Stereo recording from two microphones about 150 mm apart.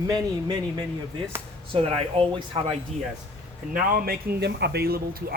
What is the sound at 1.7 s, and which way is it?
Speech, 40° right (ahead or behind).